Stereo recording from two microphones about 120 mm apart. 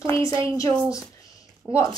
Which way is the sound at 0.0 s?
25° left (ahead or behind).